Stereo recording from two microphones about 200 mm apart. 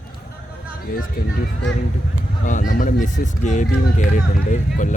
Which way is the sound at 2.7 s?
40° left (ahead or behind).